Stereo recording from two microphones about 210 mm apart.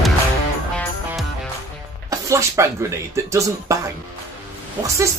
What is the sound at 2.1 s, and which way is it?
Speech, 15° right (ahead or behind).